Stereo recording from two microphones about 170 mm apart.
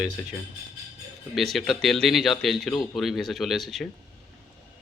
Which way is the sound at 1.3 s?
Centre (ahead or behind).